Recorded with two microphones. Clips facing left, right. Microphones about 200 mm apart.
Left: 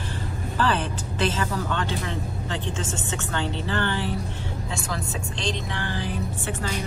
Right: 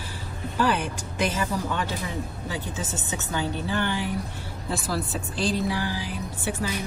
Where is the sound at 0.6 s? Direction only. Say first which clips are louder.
Even; 10° right (ahead or behind).